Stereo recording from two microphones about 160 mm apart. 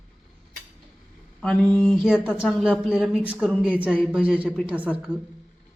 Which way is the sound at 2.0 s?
5° right (ahead or behind).